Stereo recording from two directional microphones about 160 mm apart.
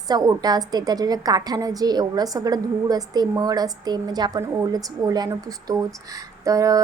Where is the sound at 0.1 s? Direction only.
25° right (ahead or behind).